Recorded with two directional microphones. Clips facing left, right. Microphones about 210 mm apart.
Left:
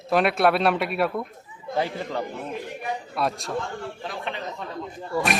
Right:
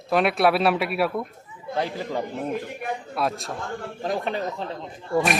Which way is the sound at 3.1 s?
Centre (ahead or behind).